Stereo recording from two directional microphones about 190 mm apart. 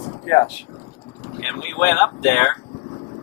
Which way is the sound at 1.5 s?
10° left (ahead or behind).